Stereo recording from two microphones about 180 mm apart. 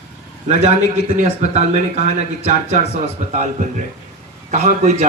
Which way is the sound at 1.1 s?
40° right (ahead or behind).